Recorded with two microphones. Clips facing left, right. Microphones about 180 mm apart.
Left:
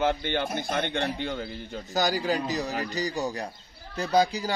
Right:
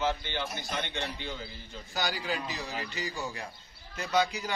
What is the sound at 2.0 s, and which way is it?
A man's voice, 40° left (ahead or behind).